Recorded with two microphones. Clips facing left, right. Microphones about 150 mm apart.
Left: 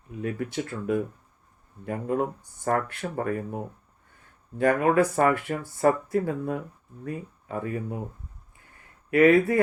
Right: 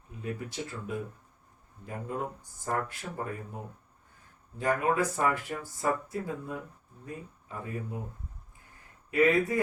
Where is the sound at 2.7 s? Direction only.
70° left (ahead or behind).